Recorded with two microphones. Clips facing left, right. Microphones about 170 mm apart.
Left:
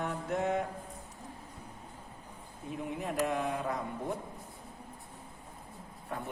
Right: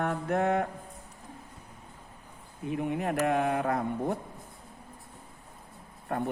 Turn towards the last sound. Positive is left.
turn(degrees=-55)  # may be behind; listen again after turning